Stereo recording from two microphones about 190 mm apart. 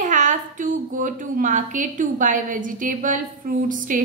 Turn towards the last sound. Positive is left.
turn(degrees=-45)  # may be behind; listen again after turning